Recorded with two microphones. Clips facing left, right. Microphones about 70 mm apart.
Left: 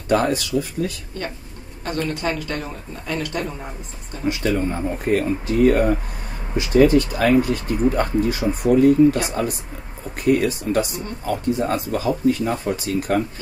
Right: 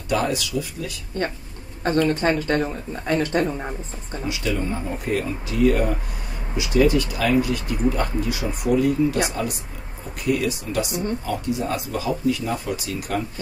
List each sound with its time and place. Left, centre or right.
0.1 s speech: left
2.0 s speech: right
4.3 s speech: left